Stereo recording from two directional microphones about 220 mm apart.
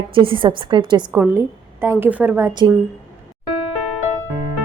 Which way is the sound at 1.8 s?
10° right (ahead or behind).